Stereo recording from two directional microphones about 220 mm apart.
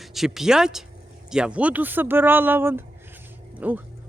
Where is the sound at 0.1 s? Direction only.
Centre (ahead or behind).